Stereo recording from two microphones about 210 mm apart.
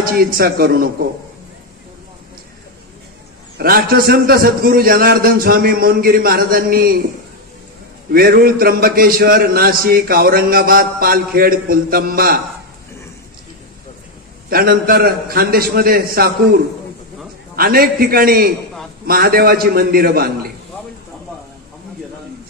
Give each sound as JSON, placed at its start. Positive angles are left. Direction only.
{"t": 0.0, "sound": "a man's voice", "side_deg": -45}
{"t": 3.5, "sound": "a man's voice", "side_deg": -45}
{"t": 8.1, "sound": "a man's voice", "side_deg": -45}
{"t": 14.5, "sound": "a man's voice", "side_deg": -45}